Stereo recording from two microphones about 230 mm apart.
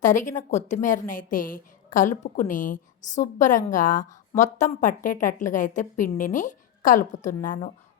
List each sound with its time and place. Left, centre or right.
0.0 s a woman's voice: left